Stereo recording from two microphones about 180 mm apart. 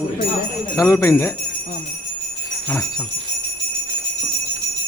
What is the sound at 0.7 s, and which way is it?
Speech, 15° left (ahead or behind).